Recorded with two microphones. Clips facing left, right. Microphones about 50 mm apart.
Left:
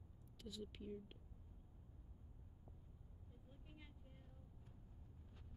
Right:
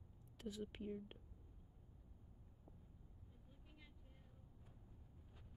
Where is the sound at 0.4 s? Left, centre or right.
Right.